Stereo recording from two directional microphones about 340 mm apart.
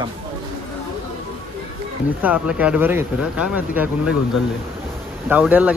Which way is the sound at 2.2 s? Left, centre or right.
Centre.